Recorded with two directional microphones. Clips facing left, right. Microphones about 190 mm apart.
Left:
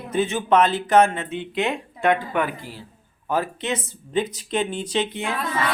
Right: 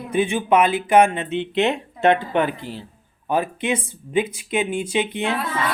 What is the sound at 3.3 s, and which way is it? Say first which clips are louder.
Speech: right 3 dB; 15° right (ahead or behind).